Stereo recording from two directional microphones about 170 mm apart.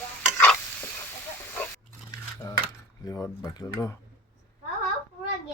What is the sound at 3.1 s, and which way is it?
Speech, 20° left (ahead or behind).